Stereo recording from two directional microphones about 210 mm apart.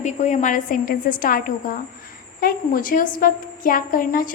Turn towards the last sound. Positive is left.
turn(degrees=40)  # may be behind; listen again after turning